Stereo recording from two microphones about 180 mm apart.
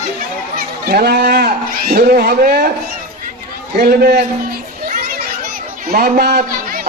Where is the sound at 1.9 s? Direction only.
55° right (ahead or behind).